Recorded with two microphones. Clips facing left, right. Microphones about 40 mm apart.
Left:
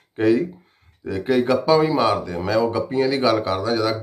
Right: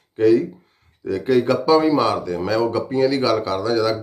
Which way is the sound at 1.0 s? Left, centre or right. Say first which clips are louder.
Right 2 dB; centre.